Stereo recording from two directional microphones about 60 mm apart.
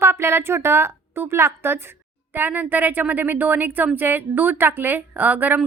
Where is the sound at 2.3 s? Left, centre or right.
Right.